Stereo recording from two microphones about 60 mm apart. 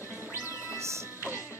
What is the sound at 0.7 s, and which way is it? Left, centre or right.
Music, right.